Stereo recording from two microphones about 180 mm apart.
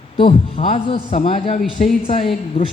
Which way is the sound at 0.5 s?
30° left (ahead or behind).